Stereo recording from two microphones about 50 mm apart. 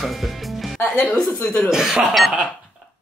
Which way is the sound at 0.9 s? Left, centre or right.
Left.